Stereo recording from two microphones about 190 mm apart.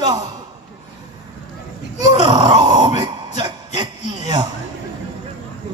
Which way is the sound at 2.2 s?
25° right (ahead or behind).